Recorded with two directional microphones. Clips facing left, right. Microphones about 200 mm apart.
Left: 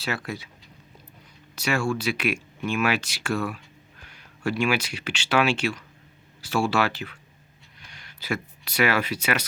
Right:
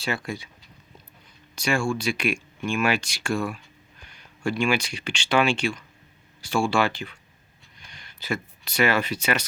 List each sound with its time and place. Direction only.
0.0 s speech: 5° left (ahead or behind)
1.5 s speech: 5° left (ahead or behind)